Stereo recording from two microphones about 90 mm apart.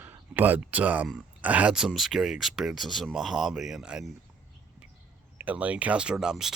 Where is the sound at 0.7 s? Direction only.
15° right (ahead or behind).